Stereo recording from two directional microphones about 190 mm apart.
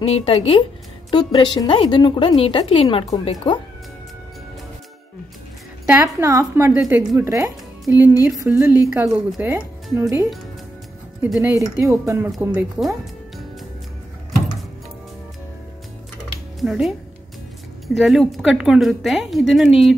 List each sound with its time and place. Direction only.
0.0 s a woman's voice: 30° left (ahead or behind)
5.9 s speech: 10° right (ahead or behind)
6.8 s speech: 5° right (ahead or behind)
11.2 s speech: centre (ahead or behind)
11.5 s speech: 15° right (ahead or behind)
16.5 s speech: centre (ahead or behind)